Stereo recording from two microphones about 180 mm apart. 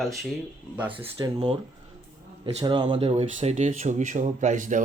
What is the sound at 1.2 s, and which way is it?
Speech, 25° right (ahead or behind).